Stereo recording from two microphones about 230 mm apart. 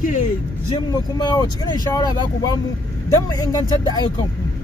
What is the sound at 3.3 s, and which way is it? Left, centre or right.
Speech, centre.